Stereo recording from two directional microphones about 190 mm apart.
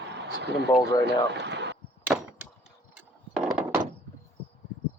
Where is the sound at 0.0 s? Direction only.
65° right (ahead or behind).